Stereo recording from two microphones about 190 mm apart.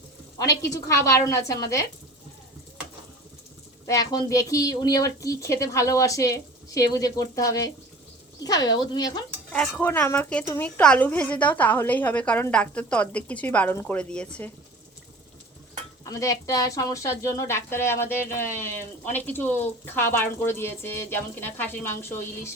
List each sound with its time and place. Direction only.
0.6 s speech: 15° left (ahead or behind)
3.8 s speech: 15° left (ahead or behind)
9.5 s speech: 5° left (ahead or behind)
16.0 s speech: 15° left (ahead or behind)